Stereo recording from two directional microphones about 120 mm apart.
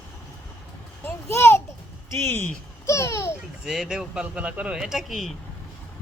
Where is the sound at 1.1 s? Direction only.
20° left (ahead or behind).